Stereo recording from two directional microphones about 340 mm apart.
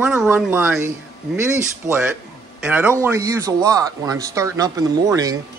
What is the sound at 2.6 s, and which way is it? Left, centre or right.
Speech, centre.